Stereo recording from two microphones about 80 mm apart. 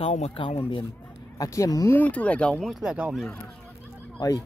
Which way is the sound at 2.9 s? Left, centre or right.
Centre.